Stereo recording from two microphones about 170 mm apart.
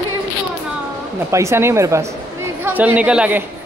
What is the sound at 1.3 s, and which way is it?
A woman's voice, 15° right (ahead or behind).